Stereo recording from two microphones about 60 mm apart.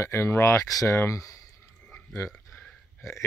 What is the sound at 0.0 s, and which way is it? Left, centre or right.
Speech, left.